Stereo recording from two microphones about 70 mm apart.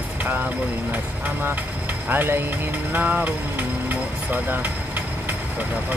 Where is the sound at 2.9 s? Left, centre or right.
Right.